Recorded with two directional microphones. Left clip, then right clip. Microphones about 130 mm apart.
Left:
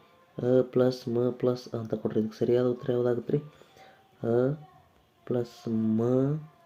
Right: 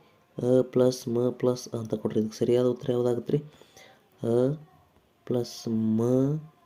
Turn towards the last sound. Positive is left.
turn(degrees=-30)  # may be behind; listen again after turning